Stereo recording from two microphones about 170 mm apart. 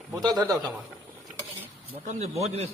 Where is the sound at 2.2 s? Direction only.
40° right (ahead or behind).